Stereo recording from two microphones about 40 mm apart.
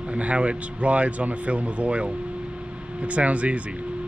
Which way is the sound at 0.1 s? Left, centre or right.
Right.